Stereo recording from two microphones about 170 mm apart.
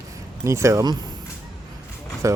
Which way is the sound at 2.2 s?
20° right (ahead or behind).